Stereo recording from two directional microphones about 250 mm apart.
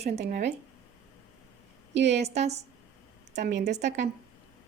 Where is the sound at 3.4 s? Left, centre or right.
Right.